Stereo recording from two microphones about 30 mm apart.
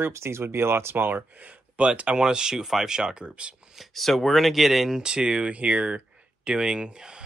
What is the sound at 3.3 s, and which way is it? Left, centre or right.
Speech, right.